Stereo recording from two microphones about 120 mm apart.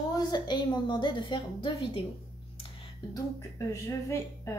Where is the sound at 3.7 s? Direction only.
25° left (ahead or behind).